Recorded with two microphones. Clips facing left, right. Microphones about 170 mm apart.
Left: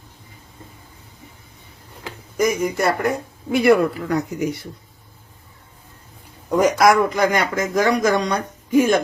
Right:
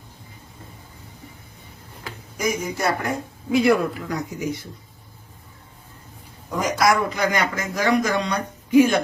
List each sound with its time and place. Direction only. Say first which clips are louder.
2.4 s speech: left 5 dB; 55° left (ahead or behind)
3.5 s speech: left 3 dB; 65° left (ahead or behind)
6.6 s speech: left 5 dB; 55° left (ahead or behind)